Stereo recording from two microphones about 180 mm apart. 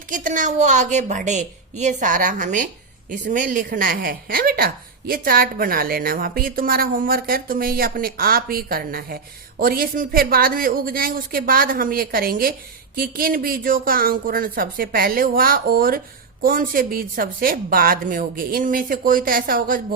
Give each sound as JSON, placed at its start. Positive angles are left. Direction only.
{"t": 0.1, "sound": "a woman's voice", "side_deg": -45}